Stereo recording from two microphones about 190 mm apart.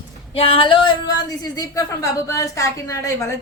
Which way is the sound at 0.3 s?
30° left (ahead or behind).